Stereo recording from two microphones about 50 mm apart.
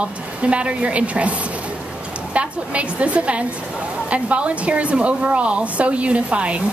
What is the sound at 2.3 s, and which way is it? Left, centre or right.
A woman's voice, right.